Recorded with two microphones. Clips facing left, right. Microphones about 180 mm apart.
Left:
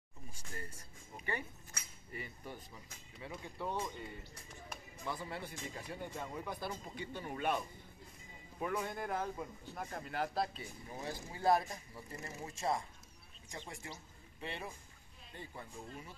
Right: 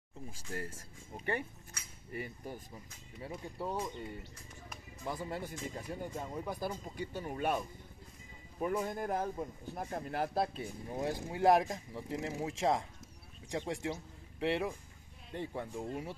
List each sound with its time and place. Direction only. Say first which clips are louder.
0.3 s speech: right 7 dB; 85° right
2.1 s speech: right 5 dB; 45° right (ahead or behind)
5.0 s speech: right 4 dB; 45° right (ahead or behind)
8.6 s speech: right 4 dB; 40° right (ahead or behind); by 12.8 s 90° right
13.5 s speech: right 11 dB; 80° right
15.8 s speech: right 10 dB; 60° right (ahead or behind)